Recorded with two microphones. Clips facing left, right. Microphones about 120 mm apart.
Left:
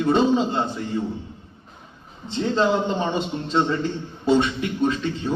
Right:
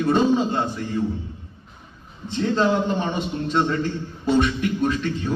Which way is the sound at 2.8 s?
25° left (ahead or behind).